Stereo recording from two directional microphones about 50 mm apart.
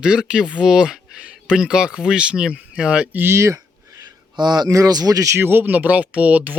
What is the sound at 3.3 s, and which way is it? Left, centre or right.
Speech, right.